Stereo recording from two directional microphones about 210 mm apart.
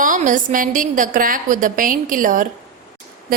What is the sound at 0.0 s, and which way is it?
A woman's voice, 40° right (ahead or behind).